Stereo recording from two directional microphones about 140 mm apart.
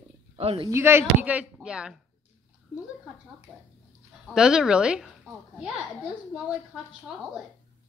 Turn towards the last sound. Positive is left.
turn(degrees=-5)  # may be behind; listen again after turning